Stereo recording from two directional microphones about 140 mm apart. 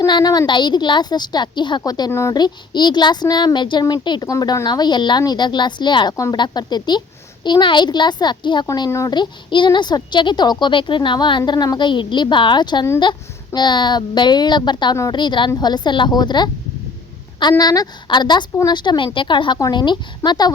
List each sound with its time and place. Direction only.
0.0 s a woman's voice: 30° left (ahead or behind)
17.6 s a woman's voice: 30° left (ahead or behind)